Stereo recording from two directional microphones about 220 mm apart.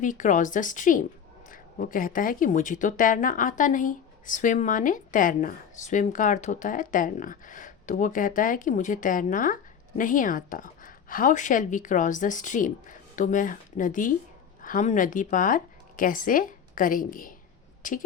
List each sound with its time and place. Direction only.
0.0 s speech: 35° left (ahead or behind)